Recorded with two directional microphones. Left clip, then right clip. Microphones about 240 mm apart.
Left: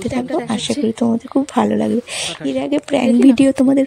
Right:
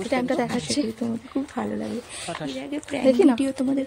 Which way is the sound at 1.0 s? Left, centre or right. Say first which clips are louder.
Left 11 dB; left.